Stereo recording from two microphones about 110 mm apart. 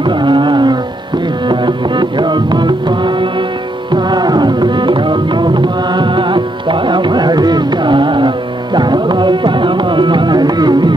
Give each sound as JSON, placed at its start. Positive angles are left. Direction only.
{"t": 0.0, "sound": "carnatic music", "side_deg": -45}
{"t": 1.5, "sound": "music", "side_deg": -45}